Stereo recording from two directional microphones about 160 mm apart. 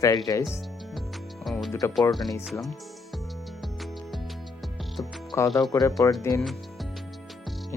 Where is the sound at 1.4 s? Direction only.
Centre (ahead or behind).